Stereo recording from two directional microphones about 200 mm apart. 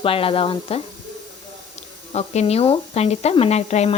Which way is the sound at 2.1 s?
30° left (ahead or behind).